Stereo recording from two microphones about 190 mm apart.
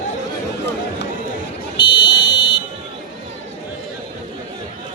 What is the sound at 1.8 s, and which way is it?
Buzzer, 25° left (ahead or behind).